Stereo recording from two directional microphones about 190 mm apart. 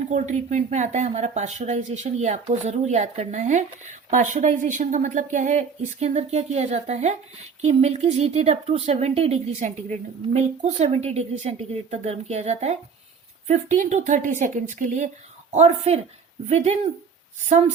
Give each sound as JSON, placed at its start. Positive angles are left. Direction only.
{"t": 0.1, "sound": "speech", "side_deg": -40}